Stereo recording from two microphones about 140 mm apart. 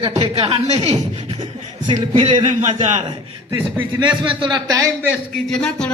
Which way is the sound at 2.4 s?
55° right (ahead or behind).